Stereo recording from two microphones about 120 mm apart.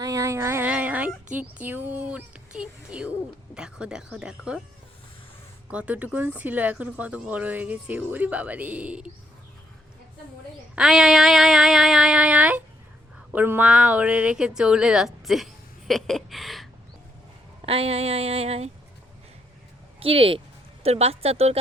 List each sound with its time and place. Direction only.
0.0 s a woman's voice: 25° right (ahead or behind); by 4.6 s 5° right (ahead or behind)
5.7 s speech: 10° right (ahead or behind)
10.8 s a sound: 5° right (ahead or behind)
13.1 s speech: 15° right (ahead or behind)
15.9 s a sound: centre (ahead or behind)
17.6 s speech: 55° right (ahead or behind)
20.0 s speech: 50° right (ahead or behind)